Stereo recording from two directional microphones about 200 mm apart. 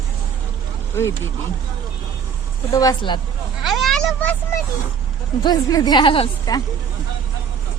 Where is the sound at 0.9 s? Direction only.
15° left (ahead or behind).